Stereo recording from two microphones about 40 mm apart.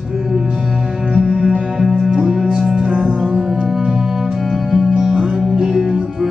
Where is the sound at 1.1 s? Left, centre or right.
Right.